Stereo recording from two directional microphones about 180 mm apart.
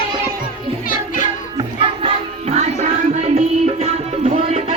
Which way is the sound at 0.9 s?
45° left (ahead or behind).